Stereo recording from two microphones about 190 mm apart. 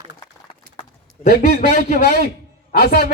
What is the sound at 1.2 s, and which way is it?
Music, 55° left (ahead or behind).